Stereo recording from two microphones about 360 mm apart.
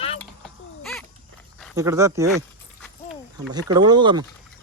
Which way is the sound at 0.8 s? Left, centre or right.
Centre.